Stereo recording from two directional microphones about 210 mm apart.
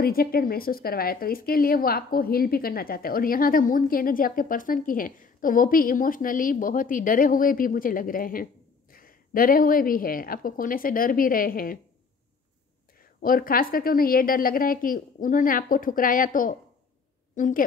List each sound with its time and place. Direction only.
0.0 s speech: 45° left (ahead or behind)
13.2 s a woman's voice: 45° left (ahead or behind)